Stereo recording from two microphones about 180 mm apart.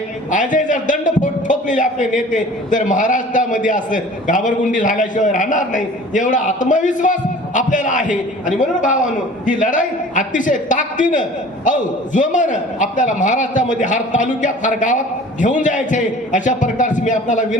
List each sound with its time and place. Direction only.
0.3 s a man's voice: 45° left (ahead or behind)